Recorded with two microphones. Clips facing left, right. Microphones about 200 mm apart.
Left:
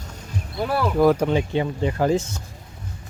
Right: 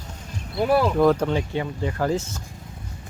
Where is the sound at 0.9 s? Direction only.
10° left (ahead or behind).